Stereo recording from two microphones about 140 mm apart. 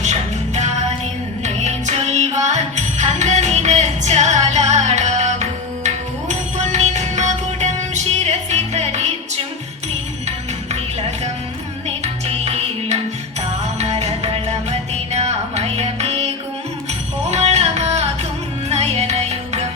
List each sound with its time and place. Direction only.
0.0 s music: 55° right (ahead or behind)
12.0 s music: 50° right (ahead or behind)